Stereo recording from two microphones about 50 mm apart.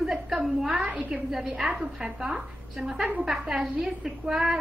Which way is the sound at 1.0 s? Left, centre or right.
Centre.